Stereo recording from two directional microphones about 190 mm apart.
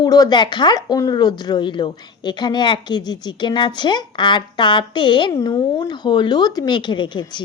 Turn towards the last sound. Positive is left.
turn(degrees=25)  # may be behind; listen again after turning